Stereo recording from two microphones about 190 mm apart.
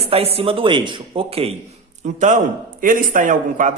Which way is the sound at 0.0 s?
30° right (ahead or behind).